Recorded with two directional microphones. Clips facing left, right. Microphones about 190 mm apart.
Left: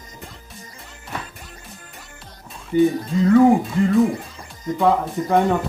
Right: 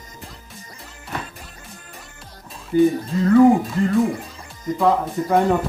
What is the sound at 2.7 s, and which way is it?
Speech, 20° left (ahead or behind).